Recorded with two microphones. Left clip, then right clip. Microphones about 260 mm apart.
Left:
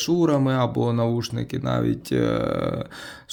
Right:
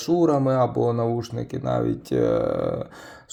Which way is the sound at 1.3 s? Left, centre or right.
Left.